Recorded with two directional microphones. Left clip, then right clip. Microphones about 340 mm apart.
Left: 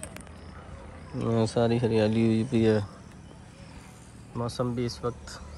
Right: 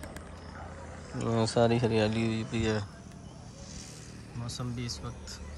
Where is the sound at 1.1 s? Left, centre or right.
Centre.